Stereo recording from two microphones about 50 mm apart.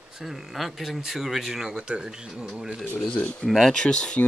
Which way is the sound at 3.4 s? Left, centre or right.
Centre.